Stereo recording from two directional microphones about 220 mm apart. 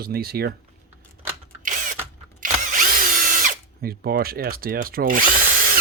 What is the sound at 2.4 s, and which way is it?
Drill, 40° right (ahead or behind).